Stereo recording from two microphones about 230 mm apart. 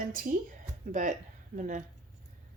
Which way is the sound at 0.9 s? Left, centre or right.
Right.